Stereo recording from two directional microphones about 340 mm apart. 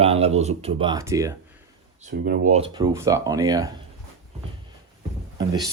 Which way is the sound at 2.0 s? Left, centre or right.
Right.